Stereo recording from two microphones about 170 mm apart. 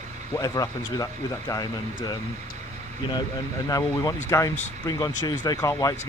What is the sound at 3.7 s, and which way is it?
Speech, 20° left (ahead or behind).